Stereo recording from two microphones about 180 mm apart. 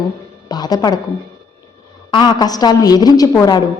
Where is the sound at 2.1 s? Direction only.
25° left (ahead or behind).